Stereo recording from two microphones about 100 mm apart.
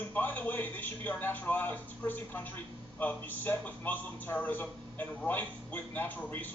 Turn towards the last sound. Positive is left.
turn(degrees=20)  # may be behind; listen again after turning